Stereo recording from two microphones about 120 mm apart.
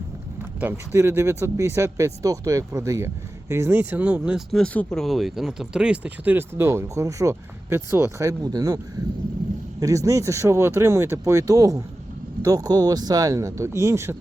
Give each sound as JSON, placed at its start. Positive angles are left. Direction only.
{"t": 0.6, "sound": "speech", "side_deg": -20}
{"t": 4.6, "sound": "speech", "side_deg": 10}
{"t": 9.8, "sound": "speech", "side_deg": -25}